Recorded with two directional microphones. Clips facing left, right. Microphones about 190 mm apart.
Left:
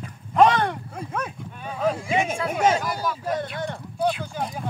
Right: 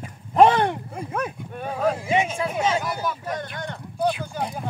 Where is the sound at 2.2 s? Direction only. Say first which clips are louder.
Left 2 dB; 50° left (ahead or behind).